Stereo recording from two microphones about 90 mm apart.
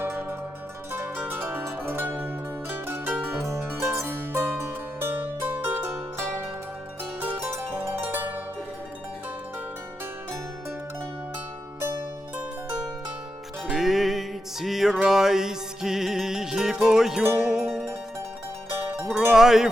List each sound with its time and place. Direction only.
0.0 s zither: 25° right (ahead or behind)
2.6 s music: 25° right (ahead or behind)
7.5 s harp: 20° right (ahead or behind)
13.7 s music: centre (ahead or behind)
19.1 s music: 5° right (ahead or behind)